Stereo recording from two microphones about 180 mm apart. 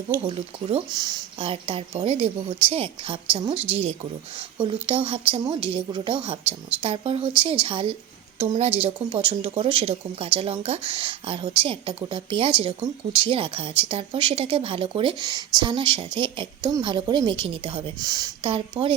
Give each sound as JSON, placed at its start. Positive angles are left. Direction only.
{"t": 0.1, "sound": "speech", "side_deg": -30}
{"t": 3.5, "sound": "a woman's voice", "side_deg": -10}
{"t": 4.5, "sound": "speech", "side_deg": -25}